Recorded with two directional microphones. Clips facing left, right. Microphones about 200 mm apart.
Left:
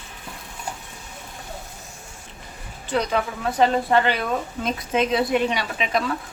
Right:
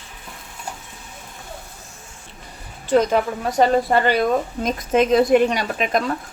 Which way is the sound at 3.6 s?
45° right (ahead or behind).